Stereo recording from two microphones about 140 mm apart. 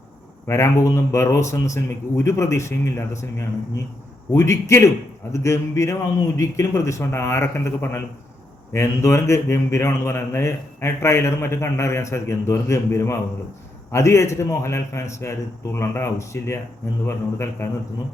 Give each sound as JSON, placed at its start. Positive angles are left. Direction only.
{"t": 0.4, "sound": "a man's voice", "side_deg": 20}